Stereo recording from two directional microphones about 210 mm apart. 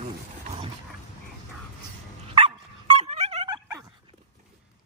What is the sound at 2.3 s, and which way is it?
Dog, 25° right (ahead or behind).